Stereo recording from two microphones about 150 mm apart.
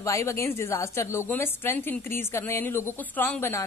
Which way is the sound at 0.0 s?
20° left (ahead or behind).